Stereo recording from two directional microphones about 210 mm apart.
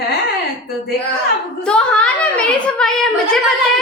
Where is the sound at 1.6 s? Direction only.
5° left (ahead or behind).